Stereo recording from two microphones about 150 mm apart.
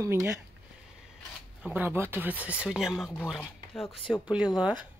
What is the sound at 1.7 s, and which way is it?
Speech, 15° right (ahead or behind).